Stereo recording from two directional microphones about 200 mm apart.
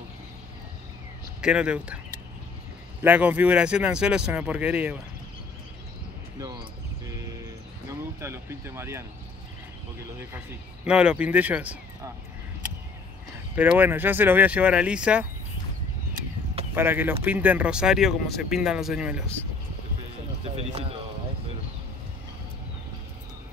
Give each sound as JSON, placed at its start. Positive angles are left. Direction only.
{"t": 1.4, "sound": "speech", "side_deg": -5}
{"t": 3.0, "sound": "speech", "side_deg": -10}
{"t": 6.4, "sound": "speech", "side_deg": -20}
{"t": 8.2, "sound": "speech", "side_deg": -10}
{"t": 10.3, "sound": "speech", "side_deg": -5}
{"t": 13.6, "sound": "speech", "side_deg": -10}
{"t": 16.7, "sound": "speech", "side_deg": -10}
{"t": 20.4, "sound": "speech", "side_deg": -30}